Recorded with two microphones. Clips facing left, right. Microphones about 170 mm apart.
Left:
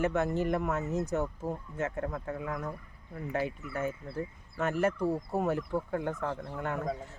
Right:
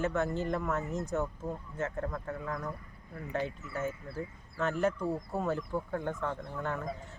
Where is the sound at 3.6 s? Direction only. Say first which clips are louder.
Left 2 dB; 60° left (ahead or behind).